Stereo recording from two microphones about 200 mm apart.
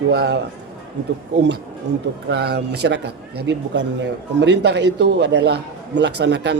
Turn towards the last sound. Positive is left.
turn(degrees=-60)  # may be behind; listen again after turning